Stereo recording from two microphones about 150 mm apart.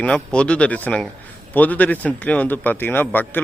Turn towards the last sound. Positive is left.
turn(degrees=10)  # may be behind; listen again after turning